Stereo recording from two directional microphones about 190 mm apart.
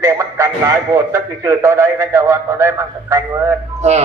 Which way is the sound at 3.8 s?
35° right (ahead or behind).